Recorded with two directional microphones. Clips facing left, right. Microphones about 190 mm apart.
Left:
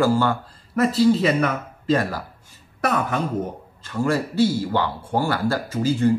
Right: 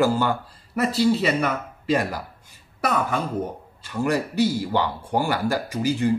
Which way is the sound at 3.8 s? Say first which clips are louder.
Left 1 dB; 15° right (ahead or behind).